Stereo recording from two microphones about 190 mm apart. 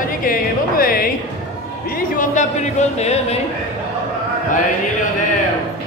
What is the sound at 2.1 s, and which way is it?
Speech, 40° left (ahead or behind).